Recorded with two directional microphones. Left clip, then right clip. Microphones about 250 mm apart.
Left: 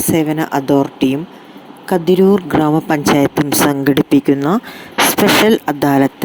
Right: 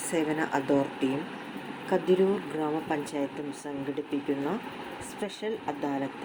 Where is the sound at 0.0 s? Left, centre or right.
Left.